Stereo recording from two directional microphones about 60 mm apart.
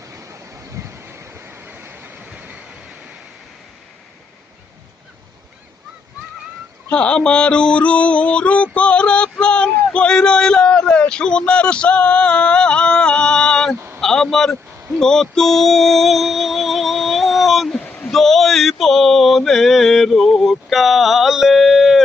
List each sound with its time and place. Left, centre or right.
0.0 s vehicle: right
2.2 s vehicle: centre
6.9 s a sound: centre
14.9 s music: centre
18.1 s male singing: centre